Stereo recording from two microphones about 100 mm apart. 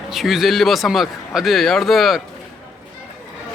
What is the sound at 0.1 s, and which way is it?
A man's voice, centre (ahead or behind).